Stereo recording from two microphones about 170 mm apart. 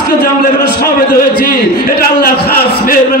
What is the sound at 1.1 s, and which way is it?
A man's voice, 60° left (ahead or behind).